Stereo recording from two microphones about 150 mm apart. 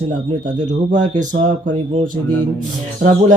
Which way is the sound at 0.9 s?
55° right (ahead or behind).